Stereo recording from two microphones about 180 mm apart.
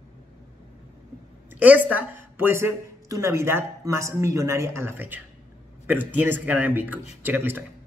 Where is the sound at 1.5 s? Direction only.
10° right (ahead or behind).